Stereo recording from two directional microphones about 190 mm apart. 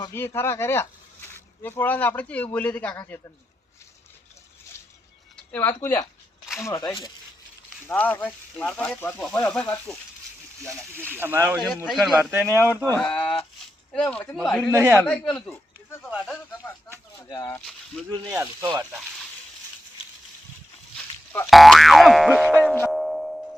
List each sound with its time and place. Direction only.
0.0 s speech: 10° left (ahead or behind)
5.5 s speech: 10° left (ahead or behind)
7.9 s speech: 10° left (ahead or behind)
10.7 s speech: 10° right (ahead or behind)
11.9 s speech: centre (ahead or behind)
12.8 s speech: 5° left (ahead or behind)
14.7 s speech: 10° right (ahead or behind)
14.9 s speech: 5° left (ahead or behind)
16.3 s speech: 10° left (ahead or behind)
18.3 s speech: 10° right (ahead or behind)
21.5 s boing: centre (ahead or behind)